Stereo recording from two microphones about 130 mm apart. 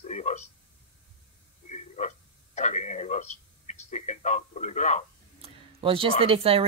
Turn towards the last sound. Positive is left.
turn(degrees=-45)  # may be behind; listen again after turning